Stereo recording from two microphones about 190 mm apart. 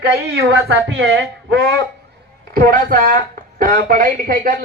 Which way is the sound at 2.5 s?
50° right (ahead or behind).